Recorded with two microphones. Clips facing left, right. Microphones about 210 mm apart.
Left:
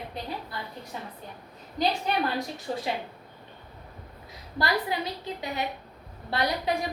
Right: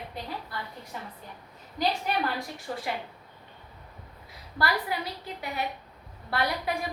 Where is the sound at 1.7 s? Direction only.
20° left (ahead or behind).